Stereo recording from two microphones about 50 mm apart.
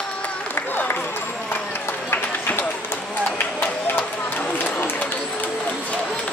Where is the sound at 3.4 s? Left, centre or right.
Left.